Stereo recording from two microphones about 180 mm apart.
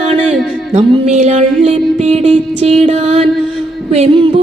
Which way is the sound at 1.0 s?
35° right (ahead or behind).